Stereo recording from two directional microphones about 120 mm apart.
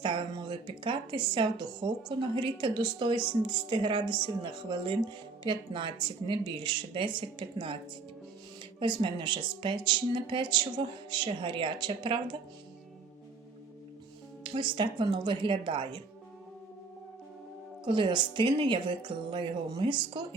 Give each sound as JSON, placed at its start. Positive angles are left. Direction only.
{"t": 0.0, "sound": "speech", "side_deg": -45}
{"t": 8.8, "sound": "speech", "side_deg": -40}
{"t": 14.4, "sound": "speech", "side_deg": -45}
{"t": 17.8, "sound": "speech", "side_deg": -40}